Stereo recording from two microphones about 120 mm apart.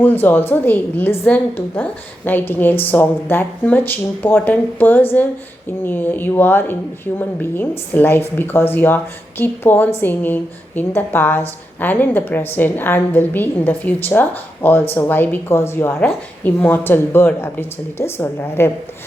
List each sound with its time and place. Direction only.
0.0 s a woman's voice: 15° left (ahead or behind)